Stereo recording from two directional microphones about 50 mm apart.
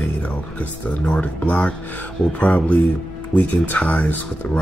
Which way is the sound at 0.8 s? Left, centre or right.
Left.